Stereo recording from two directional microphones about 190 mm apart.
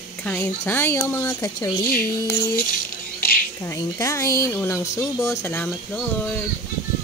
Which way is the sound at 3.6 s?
15° left (ahead or behind).